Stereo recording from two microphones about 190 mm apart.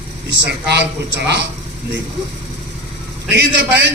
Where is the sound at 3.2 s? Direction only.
65° right (ahead or behind).